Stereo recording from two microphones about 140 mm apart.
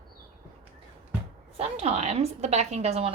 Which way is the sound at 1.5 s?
45° right (ahead or behind).